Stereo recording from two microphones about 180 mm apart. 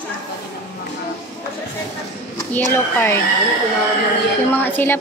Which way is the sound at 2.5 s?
10° left (ahead or behind).